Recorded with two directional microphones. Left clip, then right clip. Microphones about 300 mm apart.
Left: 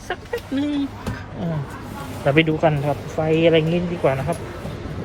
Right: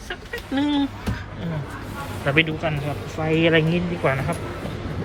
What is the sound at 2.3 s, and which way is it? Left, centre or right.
A man's voice, centre.